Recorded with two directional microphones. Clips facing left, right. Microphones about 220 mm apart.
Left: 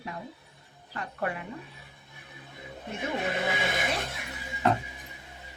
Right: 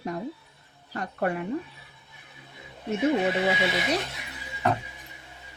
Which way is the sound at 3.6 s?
50° left (ahead or behind).